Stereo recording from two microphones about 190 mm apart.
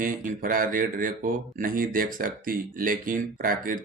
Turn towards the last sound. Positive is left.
turn(degrees=-45)  # may be behind; listen again after turning